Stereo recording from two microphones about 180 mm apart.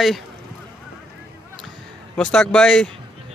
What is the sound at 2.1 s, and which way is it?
Speech, 5° left (ahead or behind).